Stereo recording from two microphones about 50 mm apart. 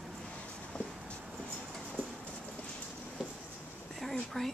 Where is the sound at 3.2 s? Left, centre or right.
Centre.